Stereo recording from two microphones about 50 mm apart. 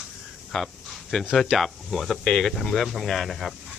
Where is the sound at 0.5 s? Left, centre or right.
Centre.